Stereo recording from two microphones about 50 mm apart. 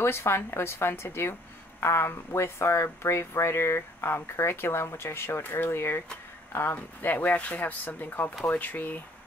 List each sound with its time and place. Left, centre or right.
0.0 s speech: left
6.5 s speech: left